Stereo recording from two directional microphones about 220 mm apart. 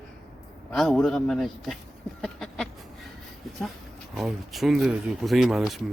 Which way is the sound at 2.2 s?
5° left (ahead or behind).